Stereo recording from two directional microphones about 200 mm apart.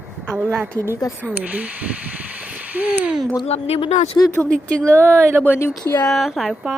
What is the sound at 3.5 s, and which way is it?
Speech, 30° left (ahead or behind).